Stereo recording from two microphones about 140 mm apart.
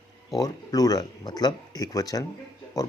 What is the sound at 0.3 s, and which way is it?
Speech, 25° left (ahead or behind).